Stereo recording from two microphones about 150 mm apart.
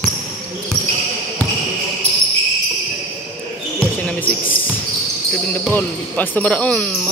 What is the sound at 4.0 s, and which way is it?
Music, 10° left (ahead or behind).